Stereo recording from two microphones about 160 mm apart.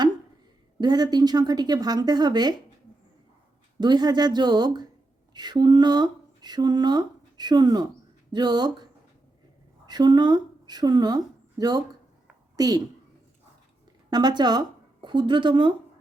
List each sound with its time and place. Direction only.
0.8 s speech: 25° right (ahead or behind)
3.8 s a woman's voice: 25° right (ahead or behind)
14.1 s speech: 25° right (ahead or behind)